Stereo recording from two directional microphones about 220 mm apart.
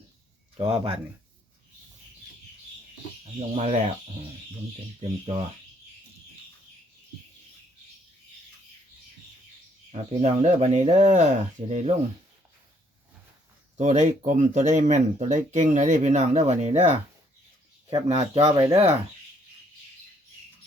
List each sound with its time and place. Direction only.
0.6 s speech: 20° right (ahead or behind)
3.3 s speech: 30° right (ahead or behind)
4.9 s speech: 30° right (ahead or behind)
9.9 s speech: 30° right (ahead or behind)
13.7 s speech: 30° right (ahead or behind)
18.4 s speech: 15° right (ahead or behind)